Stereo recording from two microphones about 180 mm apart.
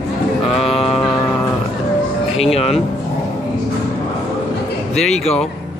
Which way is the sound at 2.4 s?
35° left (ahead or behind).